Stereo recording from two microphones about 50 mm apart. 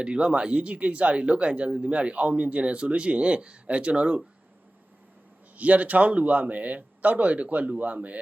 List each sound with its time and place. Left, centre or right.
0.0 s speech: centre
5.5 s a man's voice: right